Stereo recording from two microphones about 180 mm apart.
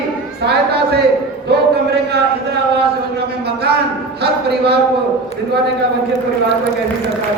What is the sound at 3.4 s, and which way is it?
A man's voice, 65° right (ahead or behind).